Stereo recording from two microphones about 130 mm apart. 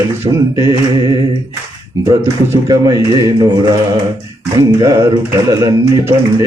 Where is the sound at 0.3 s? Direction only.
25° right (ahead or behind).